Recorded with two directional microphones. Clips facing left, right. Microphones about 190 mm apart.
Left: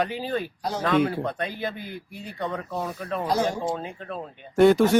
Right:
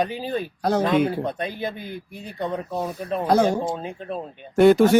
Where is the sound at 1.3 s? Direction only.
20° right (ahead or behind).